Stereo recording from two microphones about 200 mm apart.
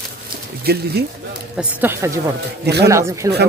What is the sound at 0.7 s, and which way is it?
Speech, 50° right (ahead or behind).